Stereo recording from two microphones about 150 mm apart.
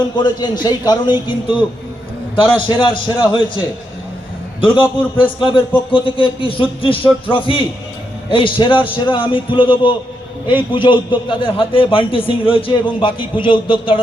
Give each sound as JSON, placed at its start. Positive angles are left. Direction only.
{"t": 0.2, "sound": "a man's voice", "side_deg": 30}
{"t": 4.8, "sound": "a man's voice", "side_deg": 35}